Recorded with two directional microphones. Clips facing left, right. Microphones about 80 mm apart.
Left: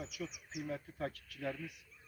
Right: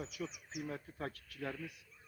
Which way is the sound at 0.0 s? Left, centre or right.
Right.